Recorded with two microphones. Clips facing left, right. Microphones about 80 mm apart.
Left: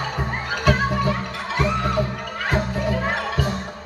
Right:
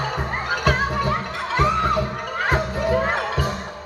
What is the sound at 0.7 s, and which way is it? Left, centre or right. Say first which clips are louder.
Music: left 2 dB; right.